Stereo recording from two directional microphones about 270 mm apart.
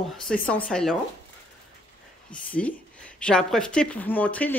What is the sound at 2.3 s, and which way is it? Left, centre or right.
Speech, centre.